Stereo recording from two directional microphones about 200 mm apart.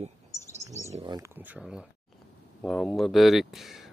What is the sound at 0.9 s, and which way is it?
Speech, 30° right (ahead or behind).